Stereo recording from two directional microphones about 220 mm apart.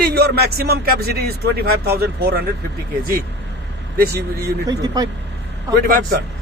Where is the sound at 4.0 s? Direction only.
45° right (ahead or behind).